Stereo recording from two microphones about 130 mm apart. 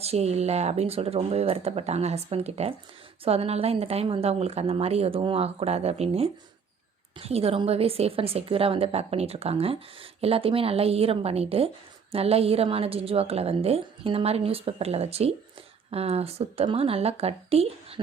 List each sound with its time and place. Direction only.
0.0 s a woman's voice: 55° right (ahead or behind)